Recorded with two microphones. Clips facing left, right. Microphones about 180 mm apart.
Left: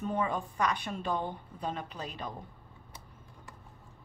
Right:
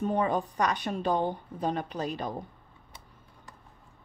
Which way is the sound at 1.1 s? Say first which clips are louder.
Right 6 dB; 90° right.